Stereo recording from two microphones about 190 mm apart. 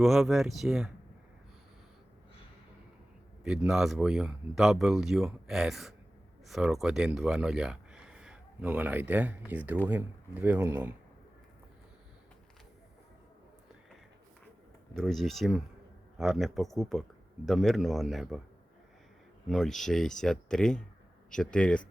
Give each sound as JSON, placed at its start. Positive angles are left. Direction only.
{"t": 0.0, "sound": "speech", "side_deg": 0}
{"t": 3.4, "sound": "speech", "side_deg": 0}
{"t": 14.9, "sound": "speech", "side_deg": 0}
{"t": 19.5, "sound": "speech", "side_deg": 0}